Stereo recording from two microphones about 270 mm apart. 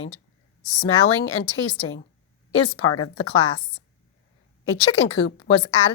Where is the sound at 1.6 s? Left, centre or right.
Left.